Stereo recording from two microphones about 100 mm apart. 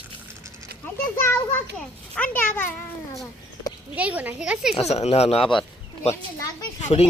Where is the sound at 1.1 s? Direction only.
25° left (ahead or behind).